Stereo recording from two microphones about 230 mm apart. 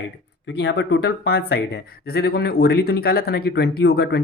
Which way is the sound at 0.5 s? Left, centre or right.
Left.